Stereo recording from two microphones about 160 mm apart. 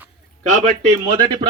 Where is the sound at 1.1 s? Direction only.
25° right (ahead or behind).